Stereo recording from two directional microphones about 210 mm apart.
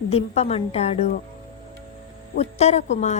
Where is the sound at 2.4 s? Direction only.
30° left (ahead or behind).